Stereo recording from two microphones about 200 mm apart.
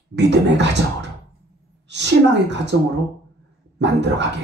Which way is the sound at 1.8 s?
60° right (ahead or behind).